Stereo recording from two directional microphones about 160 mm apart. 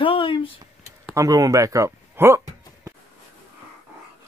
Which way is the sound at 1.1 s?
20° right (ahead or behind).